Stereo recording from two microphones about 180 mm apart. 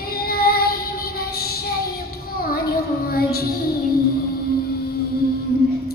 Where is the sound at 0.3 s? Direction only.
60° left (ahead or behind).